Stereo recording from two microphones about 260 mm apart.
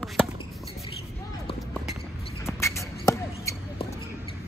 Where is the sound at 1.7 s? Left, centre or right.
Centre.